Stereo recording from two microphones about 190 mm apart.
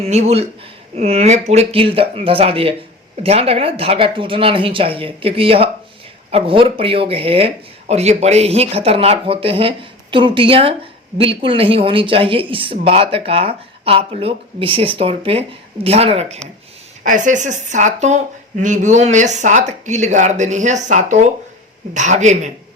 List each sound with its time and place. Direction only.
0.0 s speech: 35° right (ahead or behind)
17.0 s speech: 45° right (ahead or behind)